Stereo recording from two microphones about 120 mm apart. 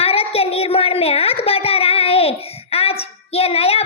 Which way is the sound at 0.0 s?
55° left (ahead or behind).